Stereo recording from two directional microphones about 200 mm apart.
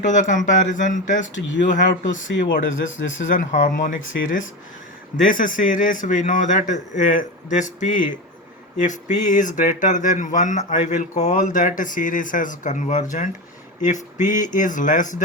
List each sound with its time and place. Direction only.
0.0 s speech: 40° left (ahead or behind)
2.2 s speech: 70° left (ahead or behind)
3.3 s speech: 40° left (ahead or behind)
5.1 s speech: 40° left (ahead or behind)